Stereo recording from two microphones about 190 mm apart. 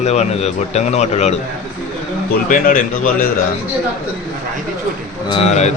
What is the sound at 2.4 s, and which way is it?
Speech, 45° left (ahead or behind).